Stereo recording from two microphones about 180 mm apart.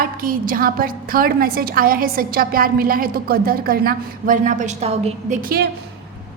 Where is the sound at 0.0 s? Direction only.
50° right (ahead or behind); by 5.4 s 35° right (ahead or behind).